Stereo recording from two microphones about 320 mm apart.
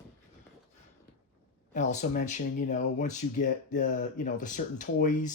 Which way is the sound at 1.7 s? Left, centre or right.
Left.